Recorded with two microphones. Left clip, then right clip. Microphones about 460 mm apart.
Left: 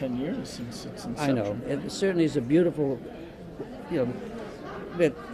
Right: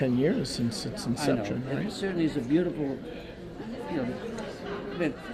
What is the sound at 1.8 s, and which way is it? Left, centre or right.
Speech, left.